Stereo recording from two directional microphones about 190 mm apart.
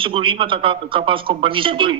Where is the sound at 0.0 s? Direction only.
25° right (ahead or behind).